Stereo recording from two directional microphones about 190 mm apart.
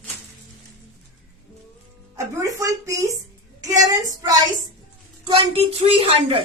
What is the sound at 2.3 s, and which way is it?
A woman's voice, 15° right (ahead or behind).